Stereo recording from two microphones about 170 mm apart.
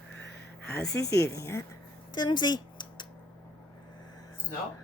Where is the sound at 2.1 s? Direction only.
25° left (ahead or behind).